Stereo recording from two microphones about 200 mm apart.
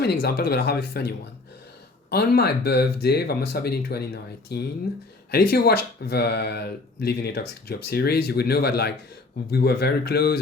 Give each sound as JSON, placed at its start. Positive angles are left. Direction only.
{"t": 0.0, "sound": "speech", "side_deg": 55}